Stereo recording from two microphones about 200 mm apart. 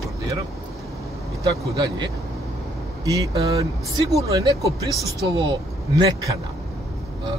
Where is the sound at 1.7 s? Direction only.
20° right (ahead or behind).